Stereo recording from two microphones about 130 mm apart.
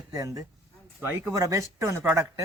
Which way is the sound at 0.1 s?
25° right (ahead or behind).